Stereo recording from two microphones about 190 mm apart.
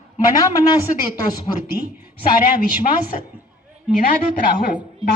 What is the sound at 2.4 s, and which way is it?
Speech, 45° left (ahead or behind).